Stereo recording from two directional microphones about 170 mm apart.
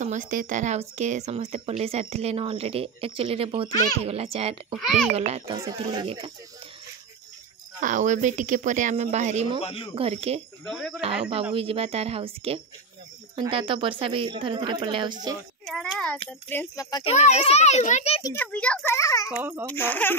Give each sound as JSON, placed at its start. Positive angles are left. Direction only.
{"t": 0.0, "sound": "speech", "side_deg": -45}
{"t": 7.8, "sound": "speech", "side_deg": -50}
{"t": 9.6, "sound": "a child's voice", "side_deg": 35}
{"t": 9.9, "sound": "speech", "side_deg": -35}
{"t": 10.6, "sound": "a child's voice", "side_deg": 5}
{"t": 11.0, "sound": "speech", "side_deg": -35}
{"t": 15.6, "sound": "a child's voice", "side_deg": 5}
{"t": 16.9, "sound": "a child's voice", "side_deg": 35}
{"t": 18.3, "sound": "a child's voice", "side_deg": 10}
{"t": 18.9, "sound": "a child's voice", "side_deg": 20}